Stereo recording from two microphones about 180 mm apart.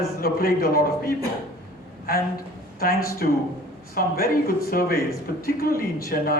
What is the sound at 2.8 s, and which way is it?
A man's voice, 55° left (ahead or behind).